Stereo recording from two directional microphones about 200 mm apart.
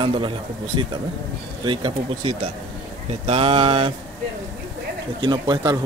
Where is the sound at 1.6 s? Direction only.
25° right (ahead or behind).